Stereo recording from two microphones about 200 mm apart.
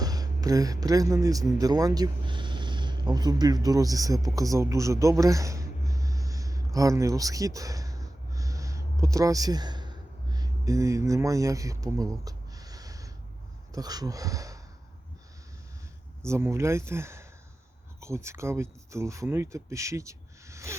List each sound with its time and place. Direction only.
0.0 s speech: 20° right (ahead or behind)
6.7 s a sound: 15° right (ahead or behind)
10.3 s speech: 15° right (ahead or behind)
16.2 s speech: 15° right (ahead or behind)